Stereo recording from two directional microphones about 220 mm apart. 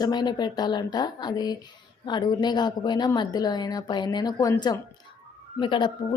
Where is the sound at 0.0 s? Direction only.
20° left (ahead or behind).